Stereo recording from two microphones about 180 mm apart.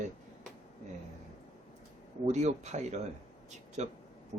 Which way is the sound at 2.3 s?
40° right (ahead or behind).